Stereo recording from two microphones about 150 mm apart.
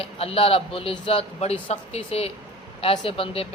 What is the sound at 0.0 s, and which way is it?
A man's voice, 40° left (ahead or behind).